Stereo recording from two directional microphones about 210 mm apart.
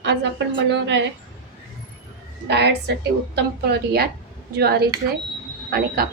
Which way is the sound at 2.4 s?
55° right (ahead or behind).